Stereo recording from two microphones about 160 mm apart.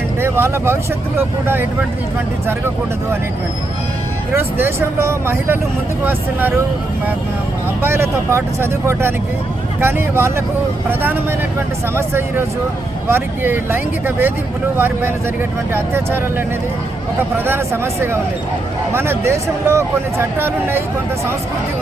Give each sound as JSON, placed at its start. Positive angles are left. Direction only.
{"t": 0.2, "sound": "speech", "side_deg": -15}
{"t": 2.5, "sound": "a man's voice", "side_deg": -15}
{"t": 4.6, "sound": "a man's voice", "side_deg": -15}
{"t": 7.8, "sound": "a man's voice", "side_deg": -15}
{"t": 17.3, "sound": "a man's voice", "side_deg": -15}